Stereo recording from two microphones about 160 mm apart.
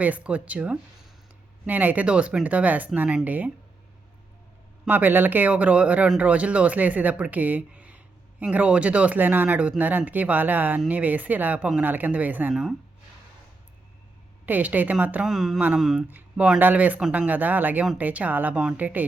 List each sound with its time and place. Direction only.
0.0 s speech: 10° right (ahead or behind)
4.9 s speech: 10° right (ahead or behind)
14.4 s speech: 10° right (ahead or behind)